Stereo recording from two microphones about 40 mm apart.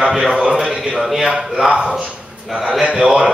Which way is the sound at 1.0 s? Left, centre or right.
Centre.